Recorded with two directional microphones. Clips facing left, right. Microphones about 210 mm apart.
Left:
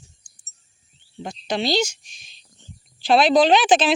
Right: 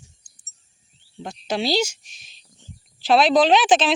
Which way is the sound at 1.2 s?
5° right (ahead or behind).